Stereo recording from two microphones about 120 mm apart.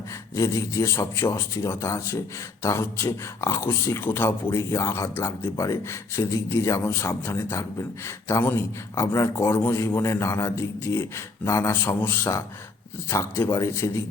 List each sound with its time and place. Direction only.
0.3 s speech: 25° left (ahead or behind)